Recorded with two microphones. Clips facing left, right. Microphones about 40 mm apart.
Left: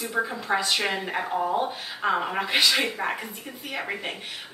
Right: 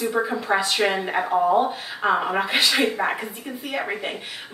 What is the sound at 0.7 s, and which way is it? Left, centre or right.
Speech, right.